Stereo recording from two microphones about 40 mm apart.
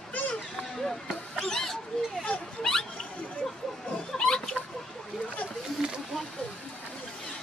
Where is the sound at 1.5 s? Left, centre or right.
Centre.